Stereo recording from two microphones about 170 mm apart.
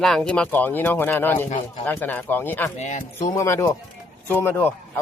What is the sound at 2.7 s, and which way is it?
Speech, 45° left (ahead or behind).